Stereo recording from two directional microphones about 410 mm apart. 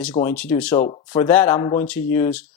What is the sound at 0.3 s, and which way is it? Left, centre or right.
Speech, centre.